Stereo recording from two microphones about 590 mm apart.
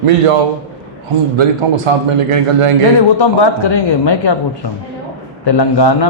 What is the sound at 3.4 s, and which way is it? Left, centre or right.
Speech, left.